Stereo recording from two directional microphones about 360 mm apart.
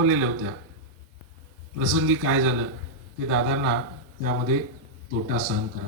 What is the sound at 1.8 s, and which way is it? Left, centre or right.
A man's voice, right.